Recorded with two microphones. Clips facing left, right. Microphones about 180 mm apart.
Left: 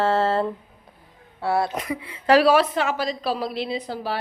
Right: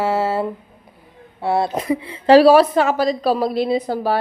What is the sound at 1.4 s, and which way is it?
A woman's voice, 20° right (ahead or behind).